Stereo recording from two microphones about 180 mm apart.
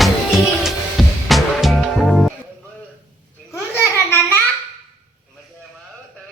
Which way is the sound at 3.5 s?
10° left (ahead or behind).